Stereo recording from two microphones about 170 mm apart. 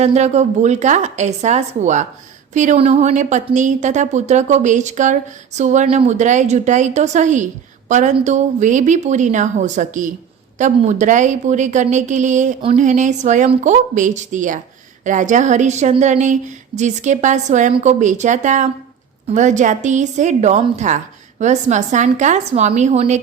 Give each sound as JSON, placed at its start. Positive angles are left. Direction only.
{"t": 0.0, "sound": "a woman's voice", "side_deg": -40}